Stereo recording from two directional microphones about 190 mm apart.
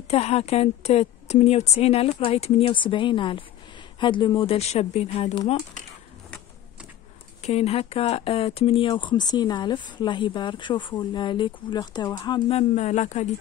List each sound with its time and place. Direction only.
0.1 s a woman's voice: 30° left (ahead or behind)
7.4 s speech: 35° left (ahead or behind)